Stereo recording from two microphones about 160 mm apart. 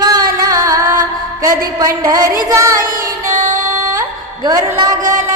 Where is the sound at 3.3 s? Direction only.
55° right (ahead or behind).